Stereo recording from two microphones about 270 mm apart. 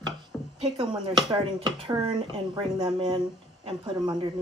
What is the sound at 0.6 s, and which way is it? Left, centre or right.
Speech, centre.